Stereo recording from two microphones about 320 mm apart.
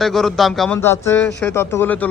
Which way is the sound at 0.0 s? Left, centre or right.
Centre.